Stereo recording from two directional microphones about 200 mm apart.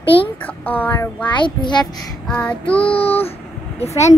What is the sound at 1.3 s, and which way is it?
Speech, 20° left (ahead or behind).